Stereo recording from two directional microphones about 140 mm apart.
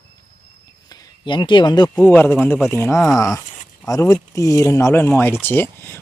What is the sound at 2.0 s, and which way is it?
Speech, 15° left (ahead or behind).